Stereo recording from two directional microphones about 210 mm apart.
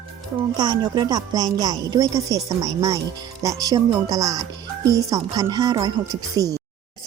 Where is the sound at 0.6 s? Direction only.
20° right (ahead or behind).